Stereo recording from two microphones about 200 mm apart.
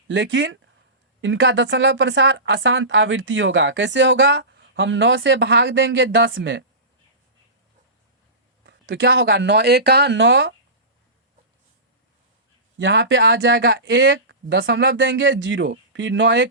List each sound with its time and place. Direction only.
0.1 s speech: 70° right (ahead or behind)
8.6 s speech: 60° right (ahead or behind)
12.8 s speech: 65° right (ahead or behind)